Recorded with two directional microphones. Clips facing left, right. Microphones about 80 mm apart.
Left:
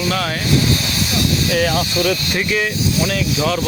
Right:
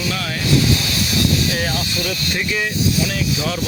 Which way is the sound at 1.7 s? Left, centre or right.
Left.